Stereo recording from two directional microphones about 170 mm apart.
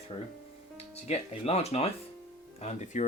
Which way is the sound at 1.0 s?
40° left (ahead or behind).